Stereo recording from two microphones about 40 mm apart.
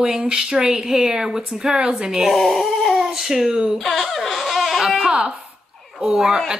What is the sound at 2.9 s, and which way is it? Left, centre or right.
Speech, centre.